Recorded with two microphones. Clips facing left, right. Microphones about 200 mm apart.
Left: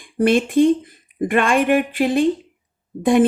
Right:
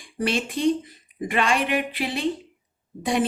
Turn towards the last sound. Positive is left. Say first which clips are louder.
# left 9 dB
turn(degrees=50)  # may be behind; listen again after turning